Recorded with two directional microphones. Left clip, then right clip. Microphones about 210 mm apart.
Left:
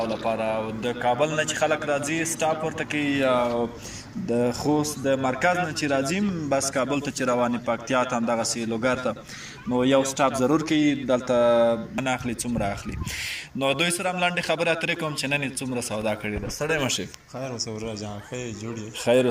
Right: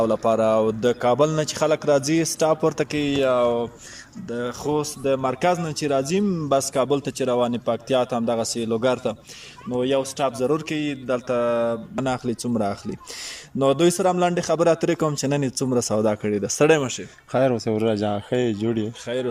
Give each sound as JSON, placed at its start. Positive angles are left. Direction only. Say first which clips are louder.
{"t": 0.0, "sound": "a man's voice", "louder": "right 6 dB", "side_deg": -25}
{"t": 4.3, "sound": "speech", "louder": "left 3 dB", "side_deg": 10}
{"t": 4.7, "sound": "a man's voice", "louder": "right 6 dB", "side_deg": -10}
{"t": 11.9, "sound": "a man's voice", "louder": "right 2 dB", "side_deg": -25}
{"t": 19.0, "sound": "speech", "louder": "left 9 dB", "side_deg": 5}